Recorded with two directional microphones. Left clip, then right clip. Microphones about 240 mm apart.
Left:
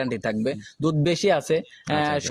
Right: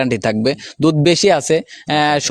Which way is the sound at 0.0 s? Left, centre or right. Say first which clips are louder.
Right 9 dB; right.